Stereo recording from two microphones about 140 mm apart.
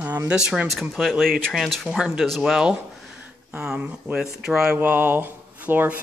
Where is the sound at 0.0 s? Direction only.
15° right (ahead or behind).